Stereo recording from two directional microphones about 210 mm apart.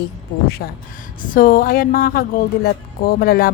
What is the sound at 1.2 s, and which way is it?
A woman's voice, 40° left (ahead or behind).